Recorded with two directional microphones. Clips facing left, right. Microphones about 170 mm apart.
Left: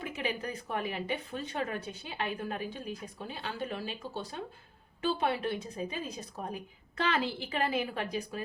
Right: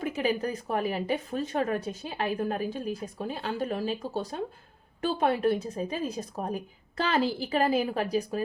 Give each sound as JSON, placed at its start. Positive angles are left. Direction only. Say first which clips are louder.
{"t": 0.0, "sound": "speech", "louder": "right 7 dB", "side_deg": -40}